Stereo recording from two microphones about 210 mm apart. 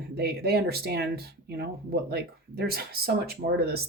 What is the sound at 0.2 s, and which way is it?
Speech, 50° right (ahead or behind).